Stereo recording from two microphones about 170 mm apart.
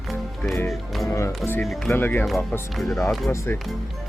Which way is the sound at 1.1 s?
15° left (ahead or behind).